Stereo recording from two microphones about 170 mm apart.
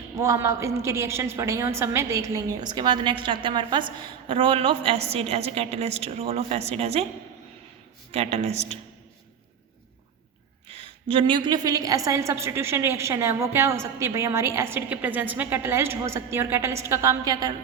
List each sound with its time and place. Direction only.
0.2 s a woman's voice: 20° right (ahead or behind); by 7.0 s 35° right (ahead or behind)
8.1 s a woman's voice: 35° right (ahead or behind)
10.7 s a sound: 35° right (ahead or behind)
11.1 s a woman's voice: 30° right (ahead or behind)